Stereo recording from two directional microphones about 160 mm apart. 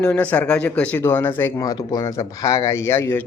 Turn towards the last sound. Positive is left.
turn(degrees=15)  # may be behind; listen again after turning